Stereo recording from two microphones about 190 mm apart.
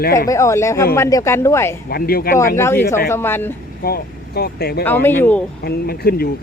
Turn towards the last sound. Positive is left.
turn(degrees=55)  # may be behind; listen again after turning